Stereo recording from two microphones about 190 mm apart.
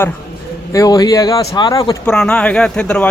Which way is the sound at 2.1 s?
5° left (ahead or behind).